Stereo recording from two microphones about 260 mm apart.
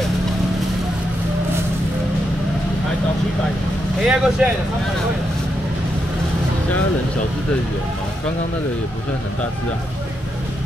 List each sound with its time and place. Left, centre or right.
4.0 s speech: centre